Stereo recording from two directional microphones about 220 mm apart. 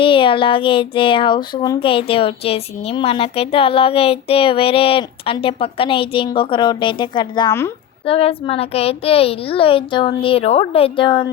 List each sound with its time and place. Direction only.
0.0 s child singing: 25° left (ahead or behind)
8.0 s child singing: 25° left (ahead or behind)